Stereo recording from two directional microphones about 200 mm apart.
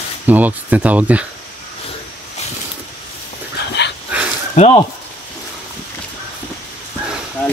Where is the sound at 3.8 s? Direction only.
60° left (ahead or behind).